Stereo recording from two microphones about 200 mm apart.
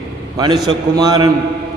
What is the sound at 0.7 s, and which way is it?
Speech, 20° right (ahead or behind).